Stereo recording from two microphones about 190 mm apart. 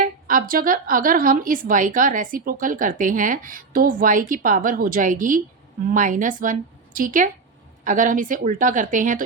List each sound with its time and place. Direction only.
0.0 s a woman's voice: 45° right (ahead or behind)